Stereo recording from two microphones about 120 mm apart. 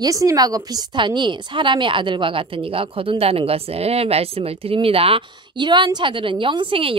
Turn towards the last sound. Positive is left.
turn(degrees=-50)  # may be behind; listen again after turning